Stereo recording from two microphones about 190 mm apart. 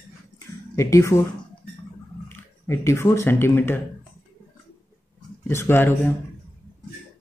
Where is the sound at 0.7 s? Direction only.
15° left (ahead or behind).